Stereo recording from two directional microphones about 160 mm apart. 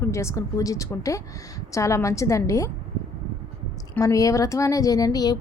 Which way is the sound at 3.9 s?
20° left (ahead or behind).